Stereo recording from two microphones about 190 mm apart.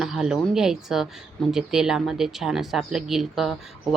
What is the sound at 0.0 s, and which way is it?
A woman's voice, centre (ahead or behind).